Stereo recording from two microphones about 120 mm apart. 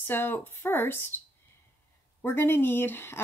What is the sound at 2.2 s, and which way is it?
Speech, 20° left (ahead or behind).